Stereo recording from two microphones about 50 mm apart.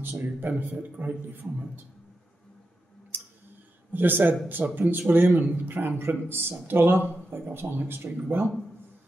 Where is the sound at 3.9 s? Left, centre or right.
Right.